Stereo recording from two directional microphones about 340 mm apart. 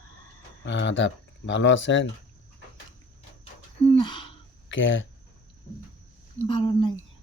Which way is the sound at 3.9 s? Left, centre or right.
Centre.